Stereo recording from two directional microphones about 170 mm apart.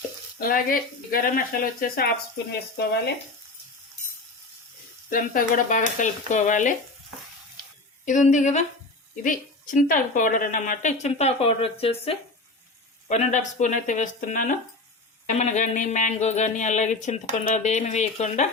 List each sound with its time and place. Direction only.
0.3 s speech: 55° left (ahead or behind)
5.0 s speech: 55° left (ahead or behind)
8.0 s speech: 45° left (ahead or behind)
11.0 s speech: 40° left (ahead or behind)